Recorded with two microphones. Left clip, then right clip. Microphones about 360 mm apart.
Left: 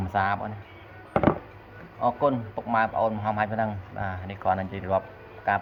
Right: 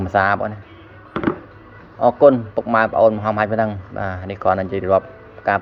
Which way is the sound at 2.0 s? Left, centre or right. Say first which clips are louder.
Right 12 dB; centre.